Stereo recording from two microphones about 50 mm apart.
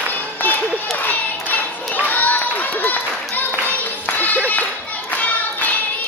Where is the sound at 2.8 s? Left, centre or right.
Left.